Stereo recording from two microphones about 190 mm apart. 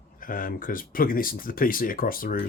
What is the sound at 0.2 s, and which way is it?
Speech, 45° left (ahead or behind).